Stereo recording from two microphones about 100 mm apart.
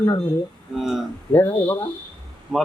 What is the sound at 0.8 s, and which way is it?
Speech, 5° right (ahead or behind).